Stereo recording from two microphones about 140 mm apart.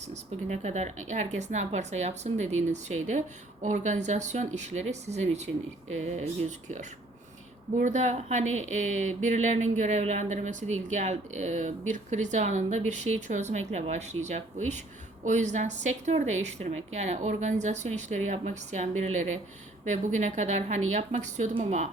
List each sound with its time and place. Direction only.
0.1 s speech: 55° right (ahead or behind)